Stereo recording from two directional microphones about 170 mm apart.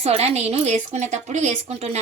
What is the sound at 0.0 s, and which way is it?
A woman's voice, 35° right (ahead or behind).